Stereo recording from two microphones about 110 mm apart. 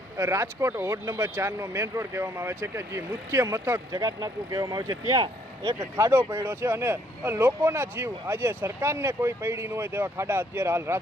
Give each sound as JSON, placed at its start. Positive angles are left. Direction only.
{"t": 0.2, "sound": "speech", "side_deg": -25}
{"t": 5.8, "sound": "speech", "side_deg": -20}